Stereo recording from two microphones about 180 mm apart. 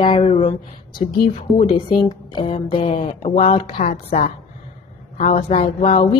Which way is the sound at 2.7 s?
30° left (ahead or behind).